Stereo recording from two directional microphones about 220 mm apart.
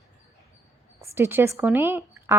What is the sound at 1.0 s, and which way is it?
A woman's voice, 10° right (ahead or behind).